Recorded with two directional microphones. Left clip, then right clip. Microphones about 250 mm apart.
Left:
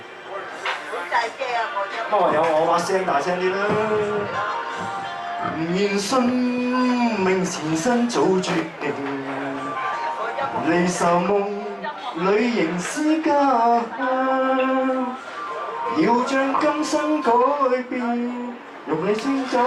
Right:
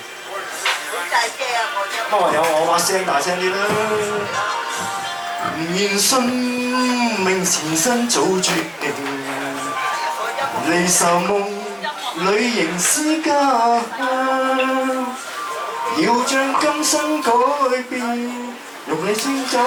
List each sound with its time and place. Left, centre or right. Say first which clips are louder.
2.0 s speech: right 2 dB; centre
5.7 s speech: right 4 dB; centre
10.7 s speech: right 3 dB; centre
12.3 s speech: right 1 dB; centre
13.7 s a sound: right 2 dB; centre
14.2 s a sound: right 2 dB; centre
14.4 s music: right 2 dB; centre
15.9 s speech: right 2 dB; centre
17.3 s a sound: right 2 dB; centre
18.9 s speech: right 2 dB; centre